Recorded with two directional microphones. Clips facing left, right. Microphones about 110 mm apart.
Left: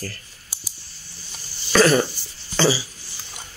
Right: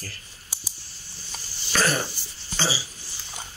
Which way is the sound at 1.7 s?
90° left.